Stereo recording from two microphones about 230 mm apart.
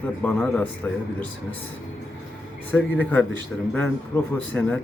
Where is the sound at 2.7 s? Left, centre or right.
Centre.